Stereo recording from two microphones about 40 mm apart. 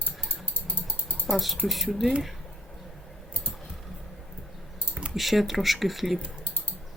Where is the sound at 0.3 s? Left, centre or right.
Left.